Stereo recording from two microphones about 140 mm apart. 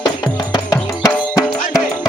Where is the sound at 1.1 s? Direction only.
10° left (ahead or behind).